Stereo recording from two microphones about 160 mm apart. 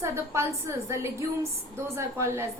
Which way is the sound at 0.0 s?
20° right (ahead or behind).